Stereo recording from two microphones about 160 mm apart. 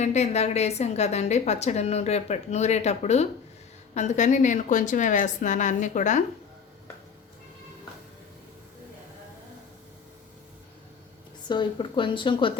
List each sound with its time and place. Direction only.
0.0 s a woman's voice: 45° left (ahead or behind)
11.4 s a woman's voice: 30° left (ahead or behind)